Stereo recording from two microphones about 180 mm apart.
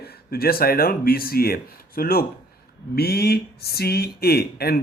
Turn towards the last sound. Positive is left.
turn(degrees=60)  # may be behind; listen again after turning